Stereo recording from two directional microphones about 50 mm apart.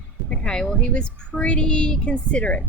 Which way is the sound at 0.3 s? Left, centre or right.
Centre.